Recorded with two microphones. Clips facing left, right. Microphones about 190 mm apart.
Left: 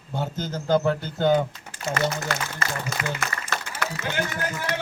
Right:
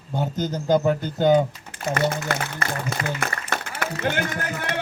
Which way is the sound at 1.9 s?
55° right (ahead or behind).